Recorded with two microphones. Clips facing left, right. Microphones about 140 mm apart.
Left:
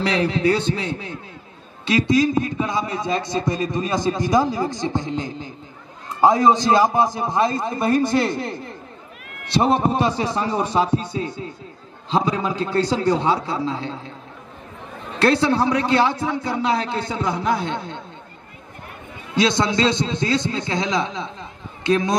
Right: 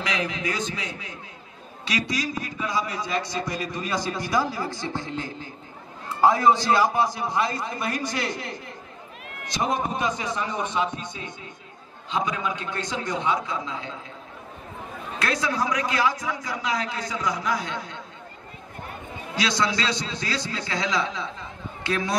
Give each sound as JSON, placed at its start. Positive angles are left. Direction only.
{"t": 0.0, "sound": "a man's voice", "side_deg": 30}
{"t": 15.1, "sound": "a man's voice", "side_deg": 30}
{"t": 19.3, "sound": "a man's voice", "side_deg": 25}